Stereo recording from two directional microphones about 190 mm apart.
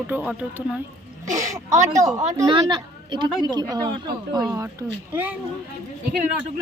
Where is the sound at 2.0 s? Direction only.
20° right (ahead or behind).